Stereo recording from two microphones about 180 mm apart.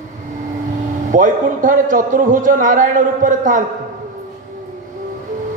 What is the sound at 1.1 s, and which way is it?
A man's voice, 45° right (ahead or behind).